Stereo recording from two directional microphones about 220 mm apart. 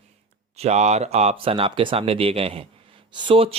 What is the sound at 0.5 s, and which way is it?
Speech, 30° right (ahead or behind).